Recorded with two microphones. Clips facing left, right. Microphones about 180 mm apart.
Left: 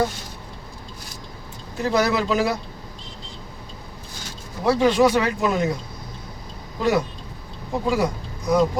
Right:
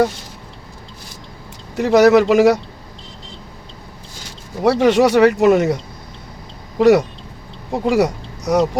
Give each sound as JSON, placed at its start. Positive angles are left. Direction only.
{"t": 1.7, "sound": "speech", "side_deg": -75}
{"t": 4.6, "sound": "speech", "side_deg": -75}
{"t": 6.7, "sound": "speech", "side_deg": -70}